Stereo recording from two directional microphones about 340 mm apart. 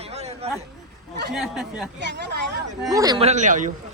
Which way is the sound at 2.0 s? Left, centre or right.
Right.